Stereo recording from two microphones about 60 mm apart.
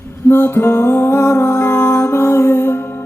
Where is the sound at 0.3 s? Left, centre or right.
Left.